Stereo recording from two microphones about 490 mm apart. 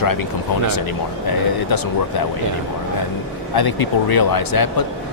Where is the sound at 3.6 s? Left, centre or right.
Left.